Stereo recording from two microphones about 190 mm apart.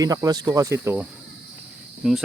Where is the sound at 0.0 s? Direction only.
20° right (ahead or behind).